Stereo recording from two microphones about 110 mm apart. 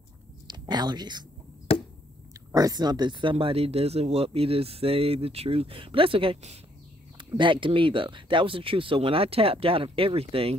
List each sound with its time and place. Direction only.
0.5 s speech: 40° right (ahead or behind)
1.7 s chop: 65° left (ahead or behind)
2.5 s speech: 35° right (ahead or behind); by 10.5 s 60° right (ahead or behind)